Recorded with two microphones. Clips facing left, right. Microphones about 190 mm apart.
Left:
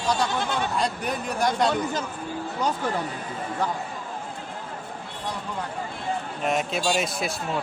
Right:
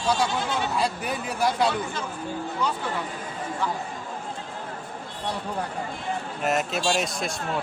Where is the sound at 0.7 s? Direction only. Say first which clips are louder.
Even; 5° right (ahead or behind).